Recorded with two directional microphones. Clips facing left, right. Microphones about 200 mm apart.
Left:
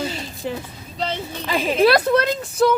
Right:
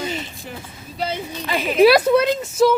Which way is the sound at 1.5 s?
35° left (ahead or behind).